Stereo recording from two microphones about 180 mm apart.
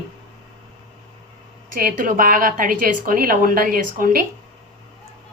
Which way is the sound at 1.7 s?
50° right (ahead or behind).